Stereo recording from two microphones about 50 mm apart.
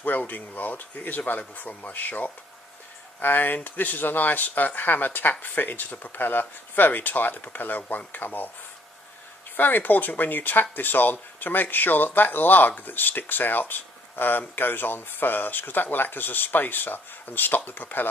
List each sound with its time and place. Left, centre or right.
0.0 s speech: left
9.6 s speech: left